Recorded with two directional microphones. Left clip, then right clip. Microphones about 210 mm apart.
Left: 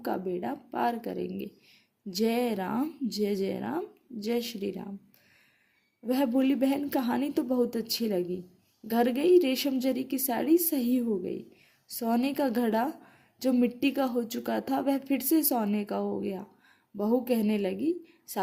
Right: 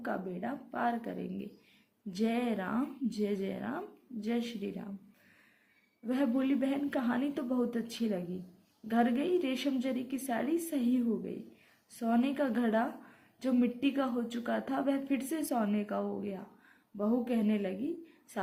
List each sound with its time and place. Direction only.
0.0 s speech: 45° left (ahead or behind)
6.1 s speech: 50° left (ahead or behind)